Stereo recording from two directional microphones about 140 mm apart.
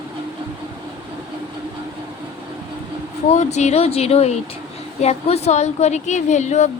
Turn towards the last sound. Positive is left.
turn(degrees=60)  # may be behind; listen again after turning